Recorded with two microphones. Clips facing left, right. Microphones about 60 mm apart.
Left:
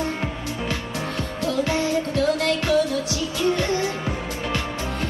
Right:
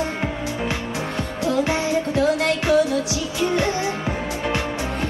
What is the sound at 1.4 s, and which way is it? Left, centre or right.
Music, right.